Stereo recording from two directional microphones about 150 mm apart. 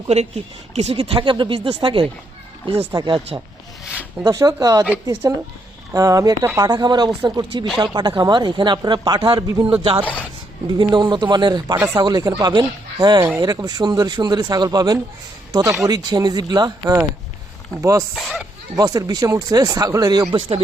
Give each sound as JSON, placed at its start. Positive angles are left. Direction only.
{"t": 0.1, "sound": "speech", "side_deg": -45}
{"t": 2.9, "sound": "speech", "side_deg": -30}
{"t": 4.2, "sound": "speech", "side_deg": -20}
{"t": 18.1, "sound": "speech", "side_deg": 0}
{"t": 18.8, "sound": "speech", "side_deg": -25}